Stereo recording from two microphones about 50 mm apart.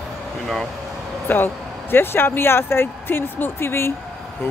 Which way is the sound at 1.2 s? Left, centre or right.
Left.